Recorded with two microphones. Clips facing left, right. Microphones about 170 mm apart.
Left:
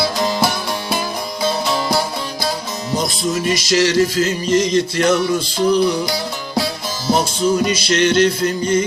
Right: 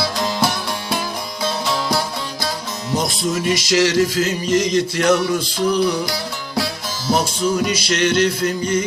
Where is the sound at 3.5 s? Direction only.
20° right (ahead or behind).